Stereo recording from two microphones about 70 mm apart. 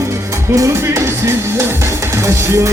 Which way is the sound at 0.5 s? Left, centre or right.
Right.